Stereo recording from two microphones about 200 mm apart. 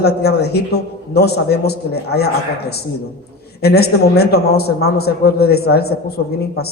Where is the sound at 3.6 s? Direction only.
55° left (ahead or behind).